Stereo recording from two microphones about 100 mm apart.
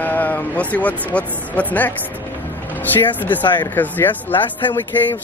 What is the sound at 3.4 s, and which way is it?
Speech, 50° left (ahead or behind).